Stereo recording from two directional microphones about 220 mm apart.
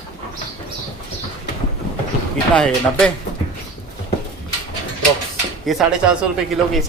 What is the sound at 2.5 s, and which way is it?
Speech, 5° left (ahead or behind).